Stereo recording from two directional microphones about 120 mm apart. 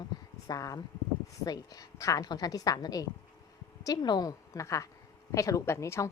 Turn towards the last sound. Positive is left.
turn(degrees=25)  # may be behind; listen again after turning